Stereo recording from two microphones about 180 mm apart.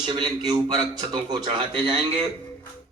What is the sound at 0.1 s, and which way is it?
Music, 20° right (ahead or behind).